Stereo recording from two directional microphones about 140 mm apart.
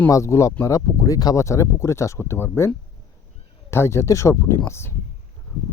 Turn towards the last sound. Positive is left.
turn(degrees=20)  # may be behind; listen again after turning